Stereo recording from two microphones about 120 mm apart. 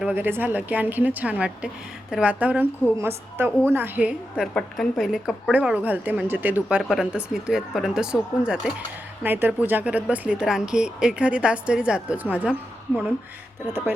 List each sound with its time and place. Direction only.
0.0 s a woman's voice: 15° right (ahead or behind)
4.5 s a woman's voice: centre (ahead or behind)
5.5 s a woman's voice: 15° right (ahead or behind)